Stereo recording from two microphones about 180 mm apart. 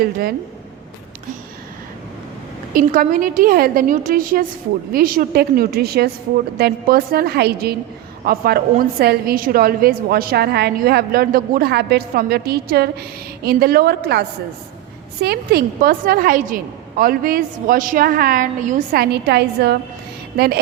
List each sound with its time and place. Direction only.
0.0 s a woman's voice: 55° right (ahead or behind)
2.7 s a woman's voice: 50° right (ahead or behind)